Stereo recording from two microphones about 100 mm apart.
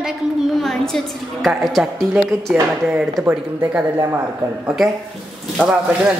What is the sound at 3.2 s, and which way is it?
Speech, 15° right (ahead or behind).